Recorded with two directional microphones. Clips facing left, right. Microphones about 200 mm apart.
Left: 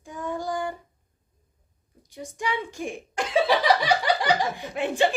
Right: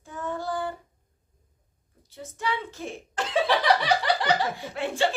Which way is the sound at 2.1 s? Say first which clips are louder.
Left 1 dB; 15° left (ahead or behind).